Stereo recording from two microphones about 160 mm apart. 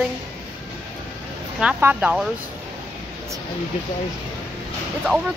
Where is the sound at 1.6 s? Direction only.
10° right (ahead or behind).